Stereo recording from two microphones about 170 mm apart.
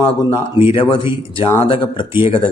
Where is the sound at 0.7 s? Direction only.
30° left (ahead or behind).